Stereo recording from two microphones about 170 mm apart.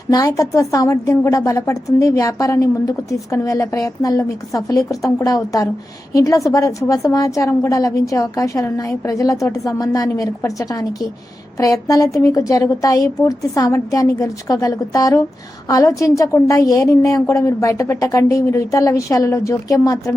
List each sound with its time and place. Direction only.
0.1 s a woman's voice: 20° left (ahead or behind)